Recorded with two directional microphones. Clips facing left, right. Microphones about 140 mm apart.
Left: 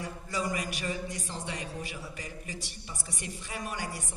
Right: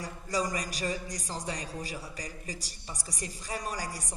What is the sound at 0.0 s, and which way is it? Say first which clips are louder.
A woman's voice: right 2 dB; 40° right (ahead or behind).